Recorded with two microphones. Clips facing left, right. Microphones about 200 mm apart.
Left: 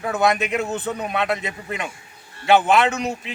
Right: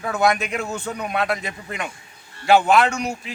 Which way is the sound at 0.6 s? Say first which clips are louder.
Left 3 dB; 20° left (ahead or behind).